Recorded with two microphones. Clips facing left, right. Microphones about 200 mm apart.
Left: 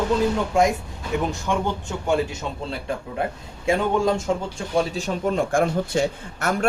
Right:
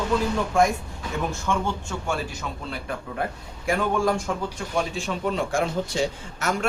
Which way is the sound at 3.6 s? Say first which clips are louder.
Left 3 dB; 20° left (ahead or behind).